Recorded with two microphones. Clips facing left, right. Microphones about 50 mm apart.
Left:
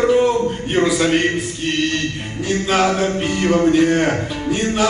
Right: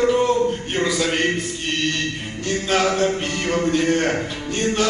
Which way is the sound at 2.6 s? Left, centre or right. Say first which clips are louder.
Left 1 dB; centre.